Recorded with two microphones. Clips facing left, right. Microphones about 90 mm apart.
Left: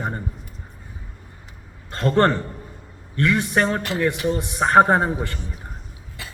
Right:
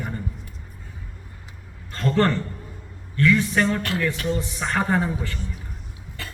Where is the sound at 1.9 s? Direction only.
55° left (ahead or behind).